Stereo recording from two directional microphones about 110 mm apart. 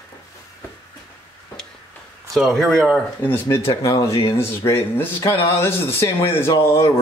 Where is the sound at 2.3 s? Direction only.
Centre (ahead or behind).